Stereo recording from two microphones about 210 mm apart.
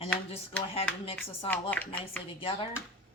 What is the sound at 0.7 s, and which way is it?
Speech, 25° left (ahead or behind).